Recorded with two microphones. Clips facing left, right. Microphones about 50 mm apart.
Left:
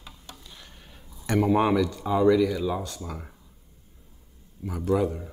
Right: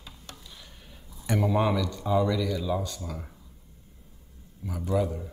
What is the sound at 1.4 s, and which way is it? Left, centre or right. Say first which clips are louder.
Speech: left 4 dB; centre.